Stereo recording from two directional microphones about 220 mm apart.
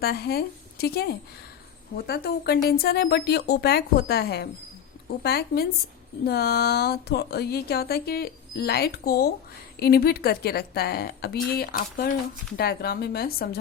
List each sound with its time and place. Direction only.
0.0 s speech: 45° left (ahead or behind)